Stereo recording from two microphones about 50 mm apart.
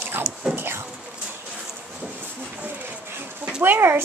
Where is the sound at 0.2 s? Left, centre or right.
Centre.